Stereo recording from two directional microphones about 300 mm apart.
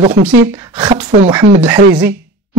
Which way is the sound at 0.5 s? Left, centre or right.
Centre.